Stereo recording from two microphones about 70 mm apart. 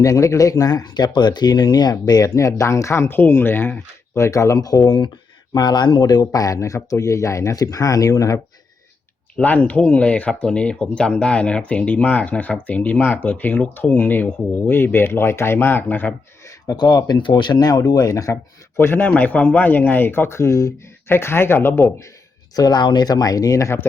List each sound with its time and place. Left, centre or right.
0.0 s speech: left
4.1 s speech: left
7.5 s speech: left
9.4 s speech: left
16.7 s speech: left
18.8 s speech: left
21.1 s speech: left
22.5 s speech: left